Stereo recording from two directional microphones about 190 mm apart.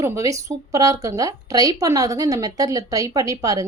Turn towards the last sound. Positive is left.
turn(degrees=-20)  # may be behind; listen again after turning